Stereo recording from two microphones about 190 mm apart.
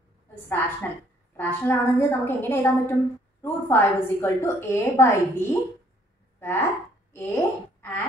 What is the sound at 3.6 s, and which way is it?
A woman's voice, 10° left (ahead or behind).